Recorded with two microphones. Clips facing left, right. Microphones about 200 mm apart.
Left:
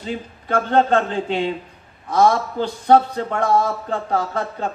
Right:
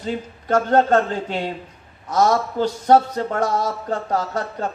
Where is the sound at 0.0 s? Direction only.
45° right (ahead or behind).